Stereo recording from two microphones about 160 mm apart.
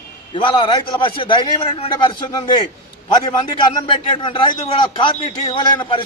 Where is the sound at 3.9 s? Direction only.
30° left (ahead or behind).